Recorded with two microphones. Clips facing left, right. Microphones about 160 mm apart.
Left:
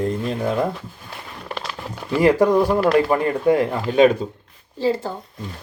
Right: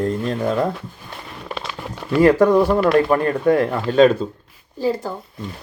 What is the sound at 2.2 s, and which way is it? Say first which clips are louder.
Speech: right 2 dB; 15° left (ahead or behind).